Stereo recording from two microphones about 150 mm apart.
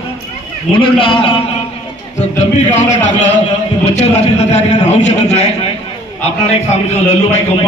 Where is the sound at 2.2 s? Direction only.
50° left (ahead or behind).